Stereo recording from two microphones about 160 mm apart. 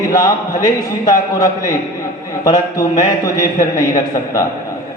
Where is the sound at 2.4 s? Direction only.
20° left (ahead or behind).